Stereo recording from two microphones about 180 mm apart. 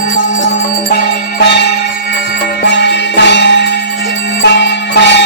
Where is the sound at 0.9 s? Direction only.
65° left (ahead or behind).